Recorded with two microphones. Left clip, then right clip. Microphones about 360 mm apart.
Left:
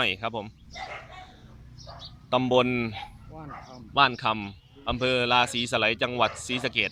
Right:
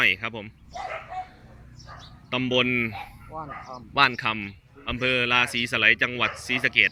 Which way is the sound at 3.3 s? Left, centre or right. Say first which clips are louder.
Right 6 dB; right.